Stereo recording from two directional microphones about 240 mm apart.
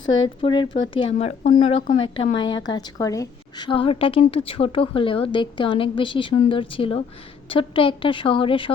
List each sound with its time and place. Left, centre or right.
0.4 s a woman's voice: centre